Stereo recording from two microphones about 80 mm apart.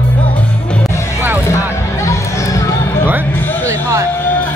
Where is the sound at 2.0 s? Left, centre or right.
Left.